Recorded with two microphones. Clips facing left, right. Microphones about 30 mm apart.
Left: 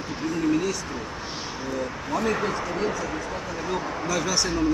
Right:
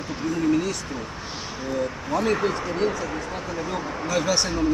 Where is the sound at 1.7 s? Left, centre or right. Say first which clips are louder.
Right 3 dB; centre.